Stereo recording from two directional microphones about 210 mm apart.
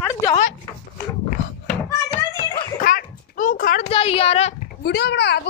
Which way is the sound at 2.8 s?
40° left (ahead or behind).